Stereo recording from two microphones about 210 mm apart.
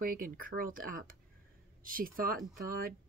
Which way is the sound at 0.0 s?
40° right (ahead or behind).